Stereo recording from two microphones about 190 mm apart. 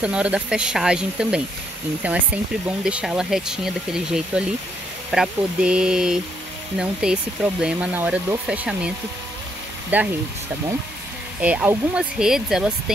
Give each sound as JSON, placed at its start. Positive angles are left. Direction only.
{"t": 0.0, "sound": "speech", "side_deg": -5}
{"t": 11.4, "sound": "speech", "side_deg": -10}